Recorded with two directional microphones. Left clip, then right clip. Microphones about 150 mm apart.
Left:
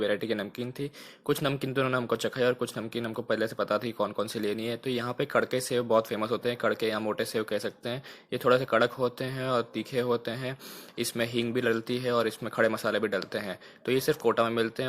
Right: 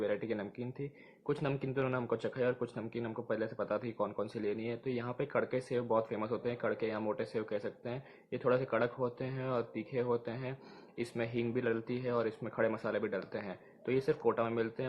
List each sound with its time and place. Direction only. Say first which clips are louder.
0.0 s speech: left 7 dB; 30° left (ahead or behind)